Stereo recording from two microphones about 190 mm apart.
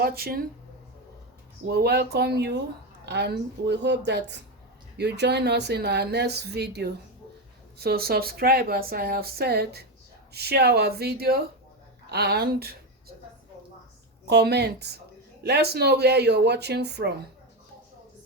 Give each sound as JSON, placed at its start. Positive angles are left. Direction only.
{"t": 0.0, "sound": "speech", "side_deg": -55}
{"t": 1.6, "sound": "speech", "side_deg": -55}
{"t": 14.3, "sound": "speech", "side_deg": -60}